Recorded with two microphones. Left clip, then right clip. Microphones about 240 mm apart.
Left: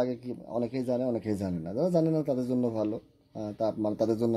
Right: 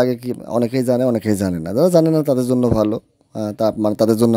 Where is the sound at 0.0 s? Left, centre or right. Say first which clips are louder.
Right 13 dB; right.